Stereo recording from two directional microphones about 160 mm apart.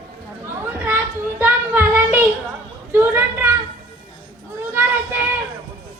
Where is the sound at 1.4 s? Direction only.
10° right (ahead or behind).